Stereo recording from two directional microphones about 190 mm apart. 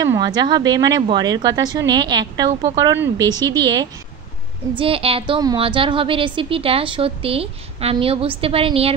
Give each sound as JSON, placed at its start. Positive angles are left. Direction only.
{"t": 0.0, "sound": "a woman's voice", "side_deg": -20}